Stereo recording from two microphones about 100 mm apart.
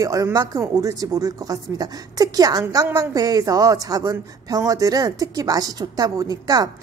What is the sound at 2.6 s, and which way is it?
A woman's voice, 25° right (ahead or behind).